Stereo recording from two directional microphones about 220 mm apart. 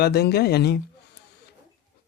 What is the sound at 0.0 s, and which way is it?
Speech, 45° left (ahead or behind).